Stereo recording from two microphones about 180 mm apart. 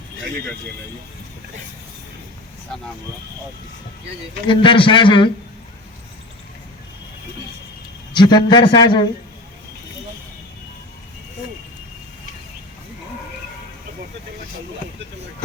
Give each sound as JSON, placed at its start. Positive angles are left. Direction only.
{"t": 4.4, "sound": "a man's voice", "side_deg": 25}
{"t": 8.1, "sound": "a man's voice", "side_deg": 25}